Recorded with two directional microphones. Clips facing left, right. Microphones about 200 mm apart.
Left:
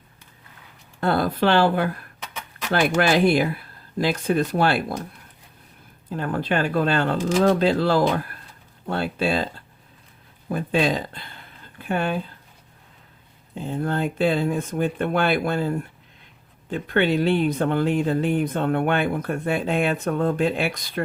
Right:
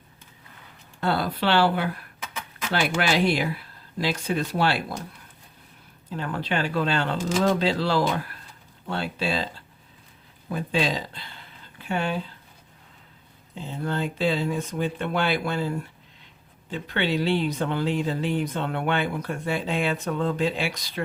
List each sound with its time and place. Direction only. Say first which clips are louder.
1.0 s speech: left 4 dB; 50° left (ahead or behind)
2.2 s a sound: even; centre (ahead or behind)
2.7 s speech: left 4 dB; 50° left (ahead or behind)
6.1 s speech: left 4 dB; 50° left (ahead or behind)
13.6 s speech: left 4 dB; 50° left (ahead or behind)
16.7 s speech: left 5 dB; 50° left (ahead or behind)